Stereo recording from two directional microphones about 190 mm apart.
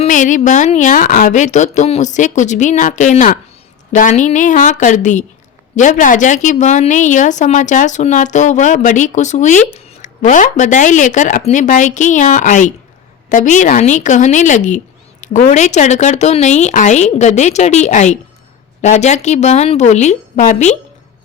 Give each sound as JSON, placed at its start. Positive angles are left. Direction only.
{"t": 0.0, "sound": "a woman's voice", "side_deg": 40}